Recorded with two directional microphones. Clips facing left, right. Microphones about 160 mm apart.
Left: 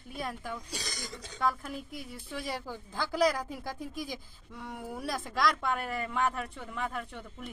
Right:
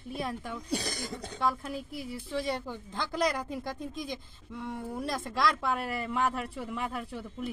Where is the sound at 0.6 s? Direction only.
55° right (ahead or behind).